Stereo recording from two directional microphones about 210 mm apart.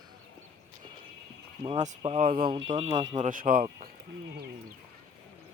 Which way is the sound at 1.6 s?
30° right (ahead or behind).